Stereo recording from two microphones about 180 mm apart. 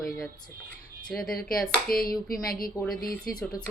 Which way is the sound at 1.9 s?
55° left (ahead or behind).